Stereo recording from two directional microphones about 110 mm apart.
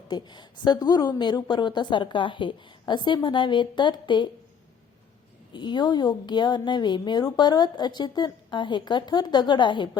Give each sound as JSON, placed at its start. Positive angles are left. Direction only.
{"t": 0.1, "sound": "a woman's voice", "side_deg": 40}
{"t": 5.5, "sound": "a woman's voice", "side_deg": 45}